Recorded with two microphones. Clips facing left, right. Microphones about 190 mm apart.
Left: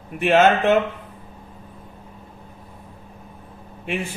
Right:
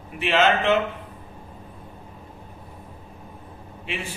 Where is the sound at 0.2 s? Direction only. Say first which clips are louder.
Left 5 dB; 50° left (ahead or behind).